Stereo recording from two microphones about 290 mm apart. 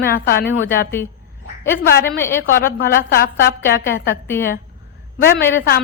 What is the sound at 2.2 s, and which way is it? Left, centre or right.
Speech, centre.